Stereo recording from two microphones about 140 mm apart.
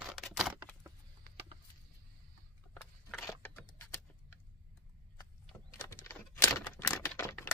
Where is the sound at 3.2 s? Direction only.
15° left (ahead or behind).